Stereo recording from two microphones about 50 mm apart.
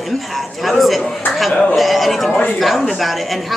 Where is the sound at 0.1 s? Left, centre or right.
Centre.